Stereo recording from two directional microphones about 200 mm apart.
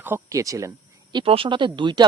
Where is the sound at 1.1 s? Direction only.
25° right (ahead or behind).